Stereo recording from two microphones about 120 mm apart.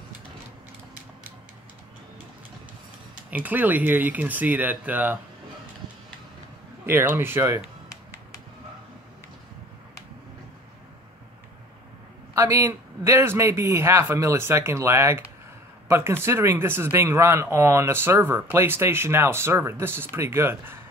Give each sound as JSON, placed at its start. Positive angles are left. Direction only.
{"t": 3.3, "sound": "speech", "side_deg": -15}
{"t": 6.9, "sound": "speech", "side_deg": -20}
{"t": 12.4, "sound": "speech", "side_deg": -25}